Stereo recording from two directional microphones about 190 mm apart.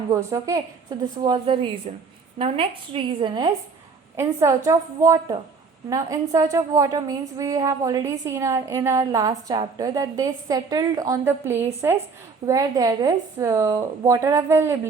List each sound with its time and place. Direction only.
0.1 s a woman's voice: 15° right (ahead or behind)